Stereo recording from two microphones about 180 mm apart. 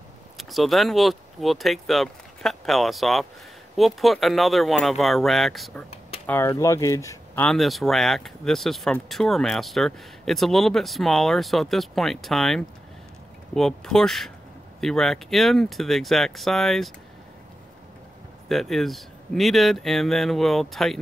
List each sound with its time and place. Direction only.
0.4 s speech: centre (ahead or behind)
6.2 s speech: 10° left (ahead or behind)
7.4 s speech: centre (ahead or behind)
18.5 s speech: centre (ahead or behind)